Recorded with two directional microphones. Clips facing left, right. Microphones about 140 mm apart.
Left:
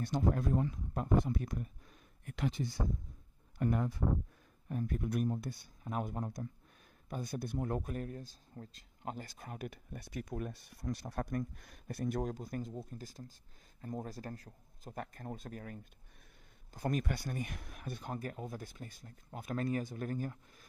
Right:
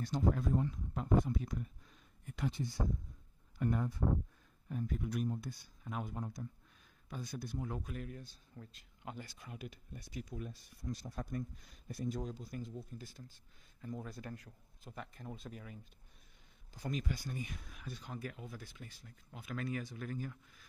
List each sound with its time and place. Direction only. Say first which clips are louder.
0.0 s speech: left 1 dB; 60° left (ahead or behind)
2.2 s speech: left 3 dB; 75° left (ahead or behind)
3.5 s speech: left 2 dB; 60° left (ahead or behind)
4.6 s speech: left 3 dB; 50° left (ahead or behind)
5.9 s speech: left 4 dB; 50° left (ahead or behind)